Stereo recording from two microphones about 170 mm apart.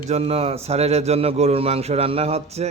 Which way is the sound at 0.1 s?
40° right (ahead or behind).